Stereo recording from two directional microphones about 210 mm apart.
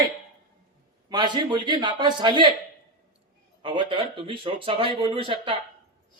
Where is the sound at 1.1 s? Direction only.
20° right (ahead or behind).